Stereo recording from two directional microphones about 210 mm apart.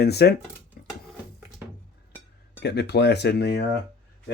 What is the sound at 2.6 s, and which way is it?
Speech, 50° left (ahead or behind).